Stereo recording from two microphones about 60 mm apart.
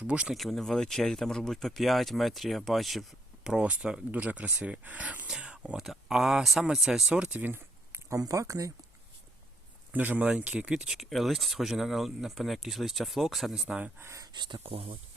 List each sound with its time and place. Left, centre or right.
0.1 s speech: centre
0.3 s speech: centre
3.4 s speech: centre
4.1 s speech: right
7.3 s speech: right
8.1 s speech: right
9.9 s speech: right
10.8 s speech: centre
13.5 s speech: centre